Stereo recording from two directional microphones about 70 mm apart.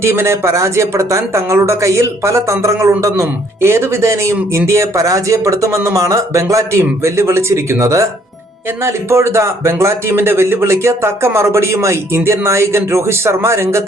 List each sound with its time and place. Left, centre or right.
0.0 s a man's voice: right